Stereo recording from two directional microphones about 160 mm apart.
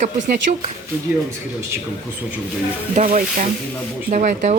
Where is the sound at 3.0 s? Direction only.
55° right (ahead or behind).